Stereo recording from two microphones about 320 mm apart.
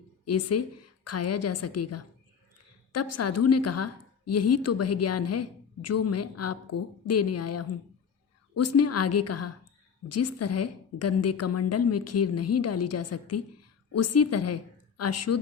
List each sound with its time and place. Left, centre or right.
0.3 s a woman's voice: left